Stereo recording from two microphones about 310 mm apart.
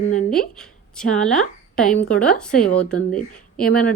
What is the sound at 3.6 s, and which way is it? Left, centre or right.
Speech, left.